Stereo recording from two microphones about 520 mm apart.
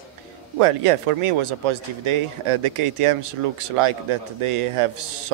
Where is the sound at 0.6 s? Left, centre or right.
Right.